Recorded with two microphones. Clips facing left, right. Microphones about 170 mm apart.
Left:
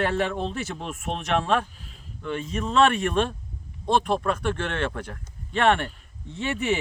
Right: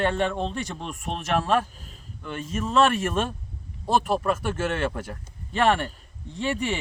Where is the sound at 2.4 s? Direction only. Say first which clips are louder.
Even; centre (ahead or behind).